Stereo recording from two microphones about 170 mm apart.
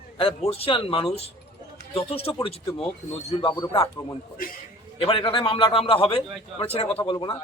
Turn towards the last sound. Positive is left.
turn(degrees=30)  # may be behind; listen again after turning